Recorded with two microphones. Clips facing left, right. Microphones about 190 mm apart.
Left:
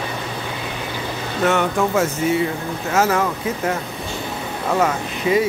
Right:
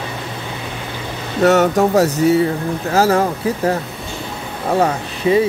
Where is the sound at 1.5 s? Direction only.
40° right (ahead or behind).